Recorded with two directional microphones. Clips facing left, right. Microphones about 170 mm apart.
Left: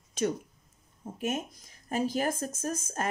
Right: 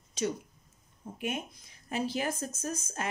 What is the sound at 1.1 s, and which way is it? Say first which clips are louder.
Speech: left 3 dB; 45° left (ahead or behind).